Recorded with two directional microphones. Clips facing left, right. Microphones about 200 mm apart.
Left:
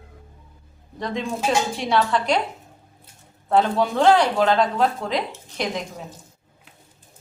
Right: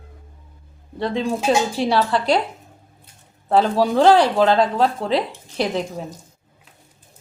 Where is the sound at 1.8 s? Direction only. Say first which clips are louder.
Right 2 dB; 35° right (ahead or behind).